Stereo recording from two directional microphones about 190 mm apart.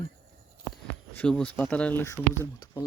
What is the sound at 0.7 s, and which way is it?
Speech, 5° left (ahead or behind).